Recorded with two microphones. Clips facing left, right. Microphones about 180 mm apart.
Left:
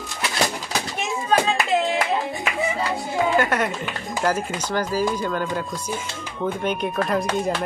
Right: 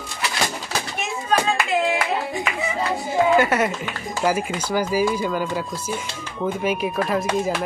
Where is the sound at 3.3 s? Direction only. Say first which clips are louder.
Right 2 dB; 5° right (ahead or behind).